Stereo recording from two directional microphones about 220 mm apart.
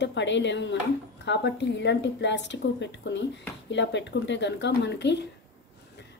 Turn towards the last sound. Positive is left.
turn(degrees=50)  # may be behind; listen again after turning